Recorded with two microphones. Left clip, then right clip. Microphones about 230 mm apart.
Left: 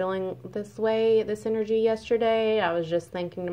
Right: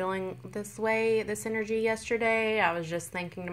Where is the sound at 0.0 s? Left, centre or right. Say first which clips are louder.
Left 4 dB; right.